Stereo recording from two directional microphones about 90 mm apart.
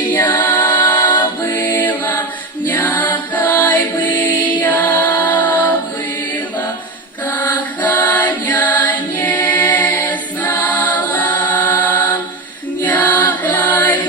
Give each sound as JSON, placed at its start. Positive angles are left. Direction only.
{"t": 0.1, "sound": "music", "side_deg": 20}
{"t": 7.3, "sound": "music", "side_deg": 20}